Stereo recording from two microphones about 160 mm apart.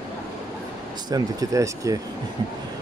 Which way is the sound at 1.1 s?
20° right (ahead or behind).